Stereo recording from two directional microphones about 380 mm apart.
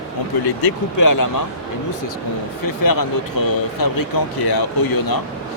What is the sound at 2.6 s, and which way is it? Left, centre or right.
Speech, left.